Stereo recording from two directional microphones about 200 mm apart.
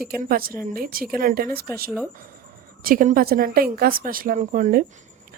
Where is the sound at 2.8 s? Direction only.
45° right (ahead or behind).